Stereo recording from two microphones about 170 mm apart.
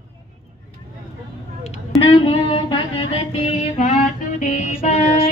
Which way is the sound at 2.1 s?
30° left (ahead or behind).